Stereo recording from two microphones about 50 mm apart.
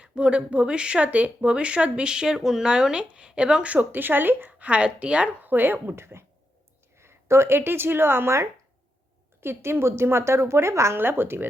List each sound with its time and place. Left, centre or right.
0.0 s speech: right
4.6 s speech: right
5.4 s speech: right
6.0 s a woman's voice: right
9.6 s a woman's voice: right
10.9 s a woman's voice: right